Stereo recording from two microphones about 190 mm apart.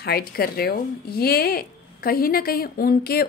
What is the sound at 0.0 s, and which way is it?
A woman's voice, 55° left (ahead or behind).